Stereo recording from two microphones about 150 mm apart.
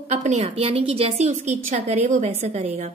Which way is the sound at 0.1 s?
50° right (ahead or behind).